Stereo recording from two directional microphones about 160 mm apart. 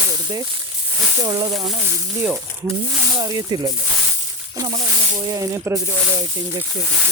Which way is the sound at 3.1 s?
25° right (ahead or behind).